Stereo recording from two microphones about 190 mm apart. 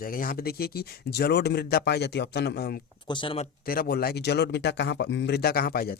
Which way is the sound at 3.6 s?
50° left (ahead or behind).